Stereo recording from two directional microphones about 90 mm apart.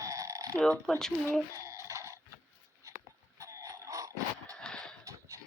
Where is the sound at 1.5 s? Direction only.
35° right (ahead or behind).